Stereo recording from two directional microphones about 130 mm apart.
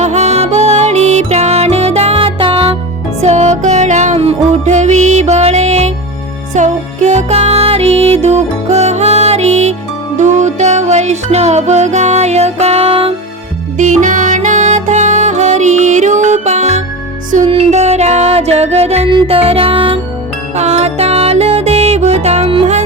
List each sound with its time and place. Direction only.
0.0 s music: 60° right (ahead or behind)
3.2 s music: 60° right (ahead or behind)
13.7 s music: 75° right (ahead or behind)
17.5 s music: 50° right (ahead or behind)
20.6 s music: 55° right (ahead or behind)